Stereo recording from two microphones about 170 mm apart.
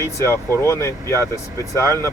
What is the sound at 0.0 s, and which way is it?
Speech, 15° left (ahead or behind).